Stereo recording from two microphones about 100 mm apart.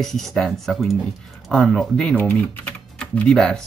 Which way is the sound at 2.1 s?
20° left (ahead or behind).